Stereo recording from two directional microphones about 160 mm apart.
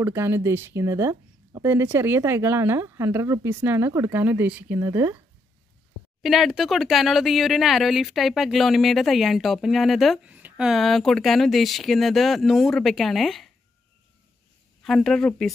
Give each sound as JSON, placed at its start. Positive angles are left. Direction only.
{"t": 0.0, "sound": "speech", "side_deg": -15}
{"t": 6.2, "sound": "speech", "side_deg": 0}
{"t": 14.8, "sound": "speech", "side_deg": 0}